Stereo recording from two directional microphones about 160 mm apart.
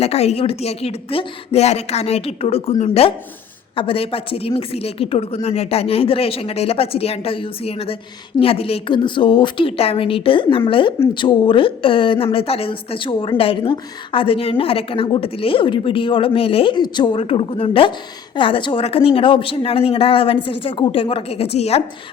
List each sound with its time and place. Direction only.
0.0 s speech: 40° left (ahead or behind)